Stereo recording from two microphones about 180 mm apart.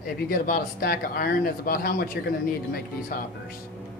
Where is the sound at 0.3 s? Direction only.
55° left (ahead or behind).